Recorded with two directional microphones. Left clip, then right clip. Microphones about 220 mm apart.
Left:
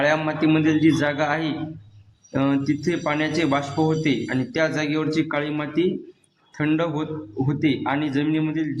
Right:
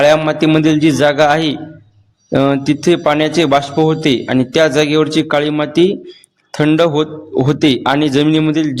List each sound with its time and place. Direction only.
0.0 s a man's voice: 40° right (ahead or behind)